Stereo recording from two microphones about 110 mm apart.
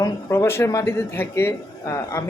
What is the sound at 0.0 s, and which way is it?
A man's voice, 25° left (ahead or behind).